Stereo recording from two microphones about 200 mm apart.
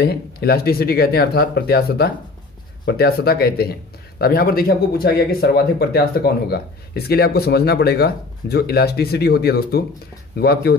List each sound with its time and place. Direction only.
0.0 s speech: 55° left (ahead or behind)